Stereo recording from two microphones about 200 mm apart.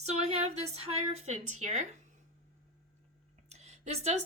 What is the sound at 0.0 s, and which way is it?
A woman's voice, 35° right (ahead or behind).